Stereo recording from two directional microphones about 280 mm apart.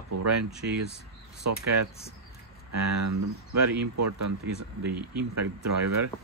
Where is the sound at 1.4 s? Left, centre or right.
Right.